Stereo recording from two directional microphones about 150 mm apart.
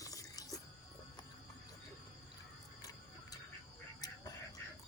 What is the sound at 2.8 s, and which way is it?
Music, 25° left (ahead or behind).